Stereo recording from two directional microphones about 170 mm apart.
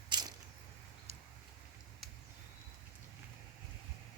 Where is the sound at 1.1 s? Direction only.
40° right (ahead or behind).